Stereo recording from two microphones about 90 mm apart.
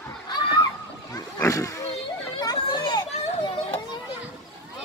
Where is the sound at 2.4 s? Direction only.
50° left (ahead or behind).